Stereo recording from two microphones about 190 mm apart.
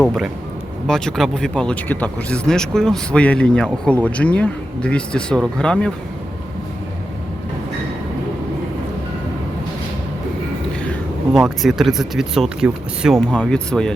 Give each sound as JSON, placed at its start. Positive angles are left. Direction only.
{"t": 0.0, "sound": "speech", "side_deg": 0}
{"t": 11.3, "sound": "speech", "side_deg": 0}